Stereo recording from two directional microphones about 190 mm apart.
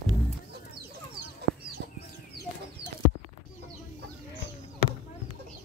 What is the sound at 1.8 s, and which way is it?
Chicken, 60° right (ahead or behind).